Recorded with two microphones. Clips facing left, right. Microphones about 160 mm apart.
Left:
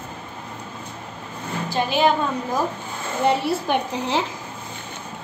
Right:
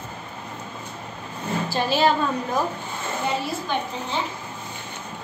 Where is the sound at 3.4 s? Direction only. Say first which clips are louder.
Left 5 dB; 75° left (ahead or behind).